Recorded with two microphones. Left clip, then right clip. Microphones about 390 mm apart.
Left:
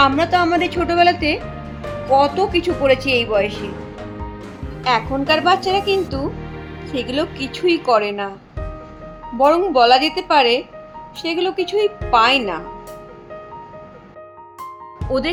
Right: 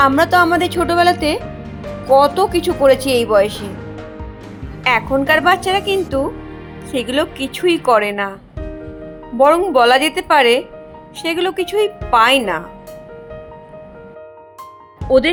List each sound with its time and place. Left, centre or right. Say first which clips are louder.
0.2 s speech: right 4 dB; centre
4.9 s speech: right 3 dB; centre
9.4 s speech: right 2 dB; centre
15.1 s speech: right 8 dB; centre